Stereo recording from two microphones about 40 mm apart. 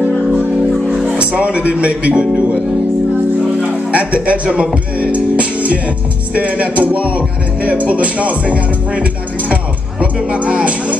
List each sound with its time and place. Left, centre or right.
1.1 s speech: right
3.9 s speech: right
6.3 s music: right